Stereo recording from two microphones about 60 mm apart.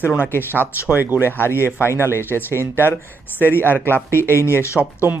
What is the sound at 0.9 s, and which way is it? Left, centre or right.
Speech, right.